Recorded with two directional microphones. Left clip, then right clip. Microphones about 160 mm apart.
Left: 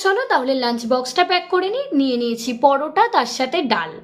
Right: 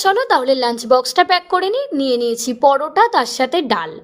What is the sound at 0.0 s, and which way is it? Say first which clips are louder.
A woman's voice: right 3 dB; 50° right (ahead or behind).